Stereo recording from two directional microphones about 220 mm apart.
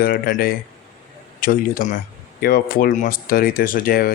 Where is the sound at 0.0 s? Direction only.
40° left (ahead or behind).